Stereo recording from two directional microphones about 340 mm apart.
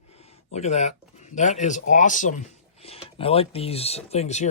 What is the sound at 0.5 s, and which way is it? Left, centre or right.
Speech, centre.